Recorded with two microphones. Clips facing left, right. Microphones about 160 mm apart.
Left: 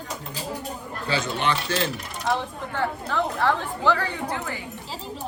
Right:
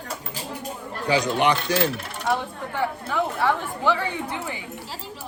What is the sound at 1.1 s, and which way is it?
Speech, 15° right (ahead or behind).